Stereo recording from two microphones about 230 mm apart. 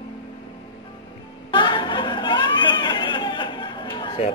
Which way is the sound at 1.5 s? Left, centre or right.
Left.